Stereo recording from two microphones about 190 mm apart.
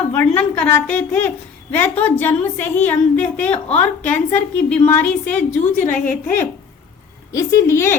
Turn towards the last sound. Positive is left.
turn(degrees=15)  # may be behind; listen again after turning